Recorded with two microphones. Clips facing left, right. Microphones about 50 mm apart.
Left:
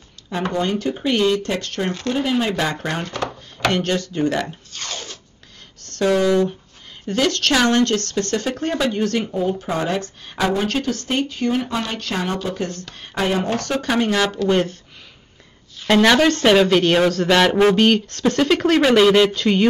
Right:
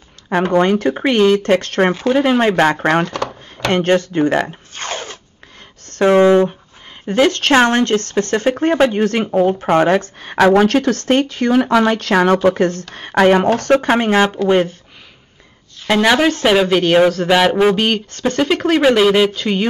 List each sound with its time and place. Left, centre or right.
0.3 s speech: right
3.1 s drawer open or close: right
3.7 s speech: right
9.3 s speech: right
10.3 s speech: right
12.5 s speech: right
13.6 s speech: right
15.9 s speech: centre